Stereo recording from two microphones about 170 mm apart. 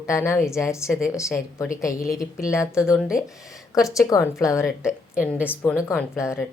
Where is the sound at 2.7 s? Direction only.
5° right (ahead or behind).